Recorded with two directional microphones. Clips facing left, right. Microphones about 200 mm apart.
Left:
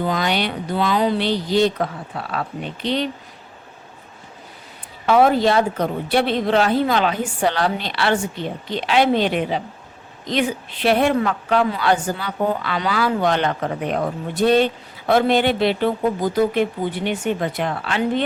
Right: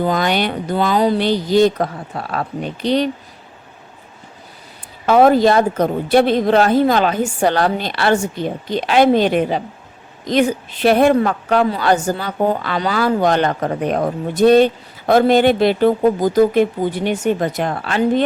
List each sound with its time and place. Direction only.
0.0 s a woman's voice: 45° right (ahead or behind)
5.0 s a woman's voice: 40° right (ahead or behind)